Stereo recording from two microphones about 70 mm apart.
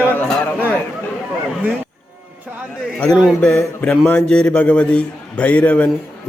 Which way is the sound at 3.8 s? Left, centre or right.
Left.